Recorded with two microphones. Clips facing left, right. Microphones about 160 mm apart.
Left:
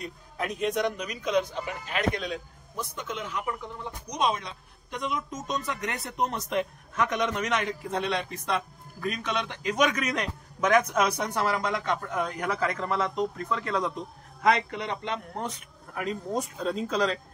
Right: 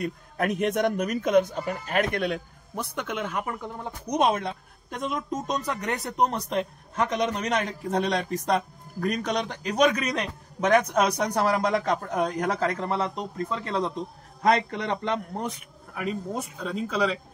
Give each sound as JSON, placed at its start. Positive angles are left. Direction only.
{"t": 0.0, "sound": "a man's voice", "side_deg": -60}
{"t": 14.4, "sound": "a man's voice", "side_deg": -40}
{"t": 15.4, "sound": "speech", "side_deg": -5}